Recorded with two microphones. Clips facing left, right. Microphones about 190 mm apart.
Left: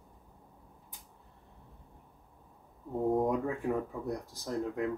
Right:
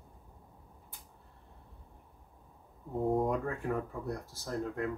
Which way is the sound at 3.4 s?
15° left (ahead or behind).